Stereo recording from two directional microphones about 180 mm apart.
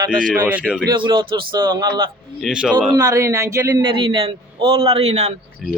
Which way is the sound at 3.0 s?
20° right (ahead or behind).